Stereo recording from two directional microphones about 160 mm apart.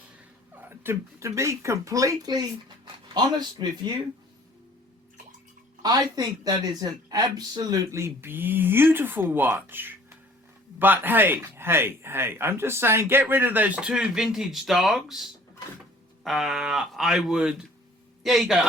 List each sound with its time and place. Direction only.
0.5 s speech: 15° right (ahead or behind)
5.8 s speech: 25° right (ahead or behind); by 18.7 s centre (ahead or behind)